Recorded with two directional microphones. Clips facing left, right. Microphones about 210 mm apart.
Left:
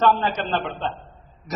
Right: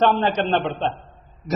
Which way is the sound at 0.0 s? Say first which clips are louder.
Right 2 dB; 25° right (ahead or behind).